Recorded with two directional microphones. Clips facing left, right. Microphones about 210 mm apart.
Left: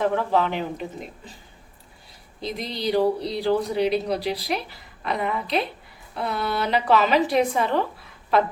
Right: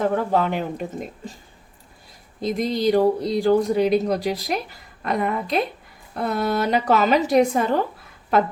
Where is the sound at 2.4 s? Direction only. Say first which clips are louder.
Right 7 dB; 45° right (ahead or behind).